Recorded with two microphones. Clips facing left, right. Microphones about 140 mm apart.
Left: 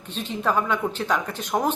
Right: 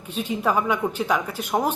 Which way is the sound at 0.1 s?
10° right (ahead or behind).